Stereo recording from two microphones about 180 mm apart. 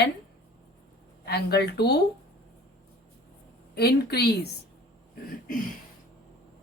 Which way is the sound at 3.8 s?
60° left (ahead or behind).